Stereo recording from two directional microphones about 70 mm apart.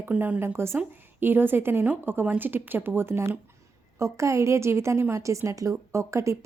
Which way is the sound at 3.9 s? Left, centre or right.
Right.